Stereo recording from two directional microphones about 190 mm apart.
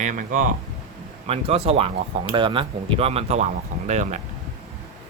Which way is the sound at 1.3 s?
30° right (ahead or behind).